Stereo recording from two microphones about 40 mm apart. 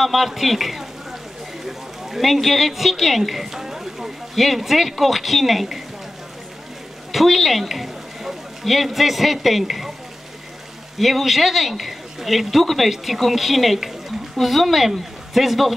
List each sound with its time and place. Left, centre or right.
0.0 s speech: centre
7.1 s speech: centre
11.0 s a woman's voice: centre